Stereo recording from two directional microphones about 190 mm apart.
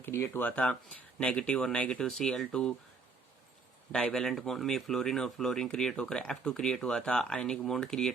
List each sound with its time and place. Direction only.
0.0 s speech: 15° left (ahead or behind)
3.9 s speech: 5° left (ahead or behind)